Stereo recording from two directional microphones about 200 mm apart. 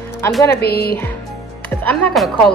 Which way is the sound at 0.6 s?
50° left (ahead or behind).